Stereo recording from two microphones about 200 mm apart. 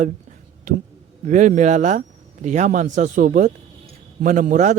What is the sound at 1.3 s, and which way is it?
A man's voice, 40° right (ahead or behind).